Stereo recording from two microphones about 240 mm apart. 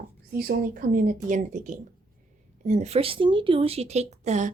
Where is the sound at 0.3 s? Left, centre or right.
Right.